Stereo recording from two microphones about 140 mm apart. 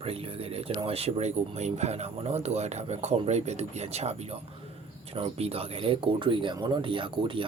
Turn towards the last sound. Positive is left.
turn(degrees=-35)  # may be behind; listen again after turning